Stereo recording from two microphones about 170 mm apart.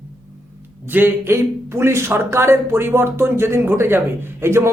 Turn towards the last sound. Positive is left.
turn(degrees=-15)  # may be behind; listen again after turning